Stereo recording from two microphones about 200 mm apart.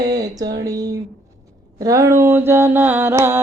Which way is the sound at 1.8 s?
15° right (ahead or behind).